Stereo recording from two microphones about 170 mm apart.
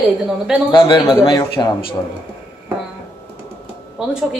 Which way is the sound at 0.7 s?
25° left (ahead or behind).